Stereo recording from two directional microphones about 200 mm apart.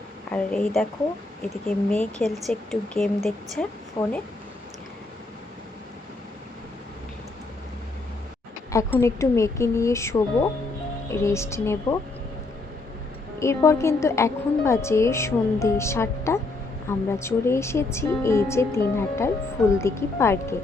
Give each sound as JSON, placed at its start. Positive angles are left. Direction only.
{"t": 0.3, "sound": "a woman's voice", "side_deg": 5}
{"t": 4.0, "sound": "speech", "side_deg": 30}
{"t": 8.7, "sound": "a woman's voice", "side_deg": 15}
{"t": 13.4, "sound": "a woman's voice", "side_deg": 15}